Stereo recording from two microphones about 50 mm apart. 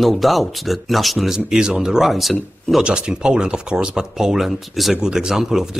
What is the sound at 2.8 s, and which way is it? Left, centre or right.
Speech, centre.